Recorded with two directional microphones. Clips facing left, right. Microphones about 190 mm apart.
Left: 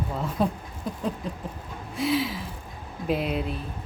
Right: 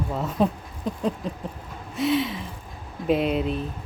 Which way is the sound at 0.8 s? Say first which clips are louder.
Right 4 dB; 5° left (ahead or behind).